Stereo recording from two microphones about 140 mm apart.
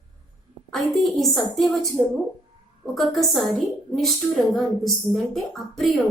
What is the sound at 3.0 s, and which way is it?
A woman's voice, centre (ahead or behind).